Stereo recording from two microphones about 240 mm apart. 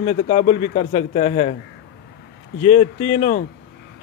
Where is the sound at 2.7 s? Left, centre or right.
Left.